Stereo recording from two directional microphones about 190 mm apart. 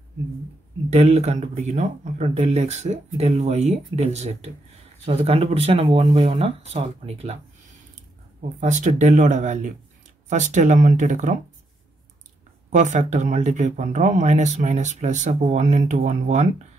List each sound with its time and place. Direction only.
0.8 s speech: 35° right (ahead or behind)
8.5 s speech: 40° right (ahead or behind)
12.6 s speech: 40° right (ahead or behind)